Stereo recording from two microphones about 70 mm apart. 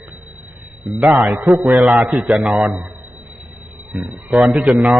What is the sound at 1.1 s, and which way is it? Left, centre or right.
A man's voice, centre.